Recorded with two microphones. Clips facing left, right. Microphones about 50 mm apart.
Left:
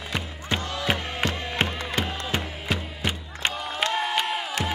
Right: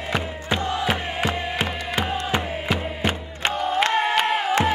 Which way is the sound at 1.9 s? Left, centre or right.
Right.